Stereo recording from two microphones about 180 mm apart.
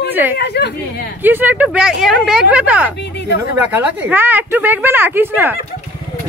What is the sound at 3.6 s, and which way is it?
Speech, 10° right (ahead or behind).